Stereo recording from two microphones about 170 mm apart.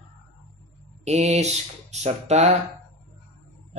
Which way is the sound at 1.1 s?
40° right (ahead or behind).